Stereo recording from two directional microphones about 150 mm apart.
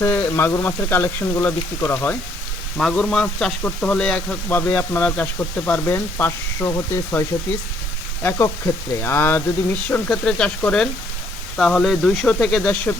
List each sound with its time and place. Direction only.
0.0 s speech: 15° left (ahead or behind)